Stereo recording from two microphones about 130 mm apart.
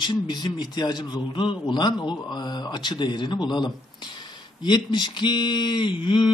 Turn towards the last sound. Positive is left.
turn(degrees=40)  # may be behind; listen again after turning